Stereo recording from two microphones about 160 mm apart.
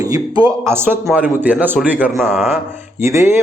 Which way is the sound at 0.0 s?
25° right (ahead or behind).